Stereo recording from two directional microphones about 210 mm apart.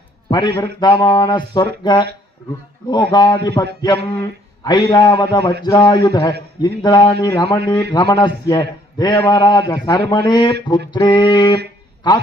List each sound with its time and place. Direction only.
0.3 s a man's voice: 20° left (ahead or behind)